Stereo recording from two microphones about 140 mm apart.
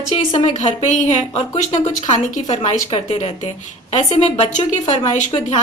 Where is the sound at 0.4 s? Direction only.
60° left (ahead or behind); by 4.4 s 45° left (ahead or behind).